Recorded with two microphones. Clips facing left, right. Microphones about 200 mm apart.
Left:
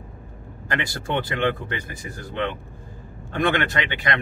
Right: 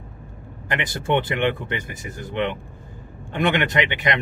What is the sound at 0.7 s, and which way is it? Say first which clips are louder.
Speech: right 4 dB; 20° right (ahead or behind).